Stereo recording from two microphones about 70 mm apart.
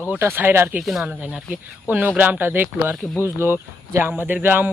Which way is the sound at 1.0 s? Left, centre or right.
Centre.